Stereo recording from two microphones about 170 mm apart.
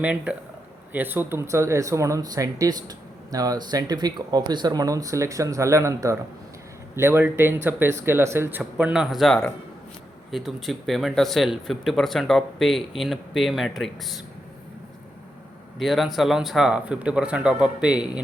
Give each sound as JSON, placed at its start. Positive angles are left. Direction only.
{"t": 0.0, "sound": "speech", "side_deg": -5}
{"t": 15.8, "sound": "speech", "side_deg": 0}